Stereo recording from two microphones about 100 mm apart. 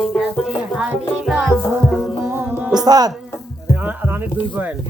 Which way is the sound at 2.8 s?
40° right (ahead or behind).